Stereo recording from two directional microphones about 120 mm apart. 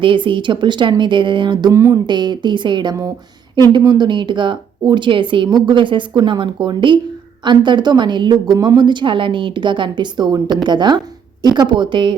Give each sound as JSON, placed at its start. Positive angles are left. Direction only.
{"t": 0.0, "sound": "speech", "side_deg": -45}
{"t": 1.7, "sound": "a sound", "side_deg": -25}
{"t": 2.0, "sound": "speech", "side_deg": -40}